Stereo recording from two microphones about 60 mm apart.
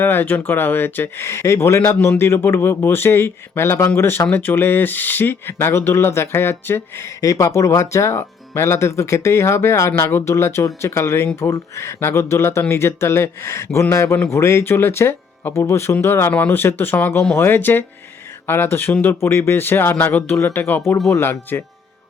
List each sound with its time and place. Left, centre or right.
0.0 s speech: left
1.8 s speech: left
7.2 s speech: left